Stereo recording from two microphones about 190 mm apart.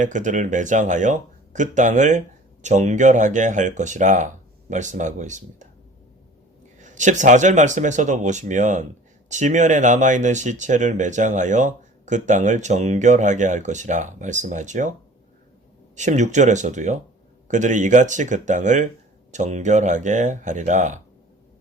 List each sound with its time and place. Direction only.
0.0 s speech: 40° right (ahead or behind)
6.7 s speech: 40° right (ahead or behind)
16.0 s speech: 40° right (ahead or behind)